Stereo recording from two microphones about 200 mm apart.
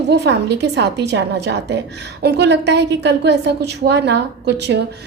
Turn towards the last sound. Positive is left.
turn(degrees=-60)  # may be behind; listen again after turning